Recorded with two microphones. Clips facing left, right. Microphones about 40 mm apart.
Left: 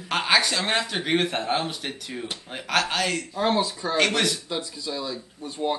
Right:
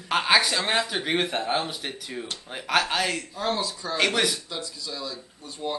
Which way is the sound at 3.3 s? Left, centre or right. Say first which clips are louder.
Left 4 dB; centre.